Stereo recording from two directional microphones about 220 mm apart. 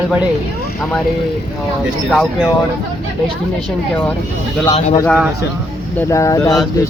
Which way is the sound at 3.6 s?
5° left (ahead or behind).